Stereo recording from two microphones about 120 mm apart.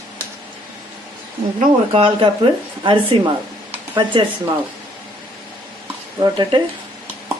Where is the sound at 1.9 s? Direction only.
45° right (ahead or behind).